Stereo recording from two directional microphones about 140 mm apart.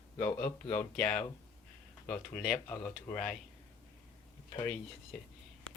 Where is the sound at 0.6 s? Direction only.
10° left (ahead or behind).